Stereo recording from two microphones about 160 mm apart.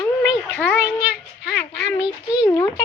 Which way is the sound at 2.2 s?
25° left (ahead or behind).